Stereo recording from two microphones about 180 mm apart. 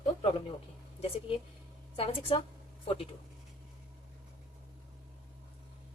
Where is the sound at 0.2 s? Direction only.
30° left (ahead or behind).